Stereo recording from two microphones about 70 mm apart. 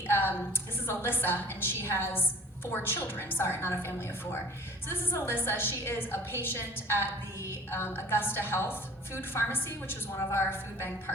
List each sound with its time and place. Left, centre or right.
0.1 s a woman's voice: left